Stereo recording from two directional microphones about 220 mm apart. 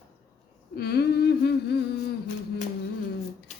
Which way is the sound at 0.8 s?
45° left (ahead or behind).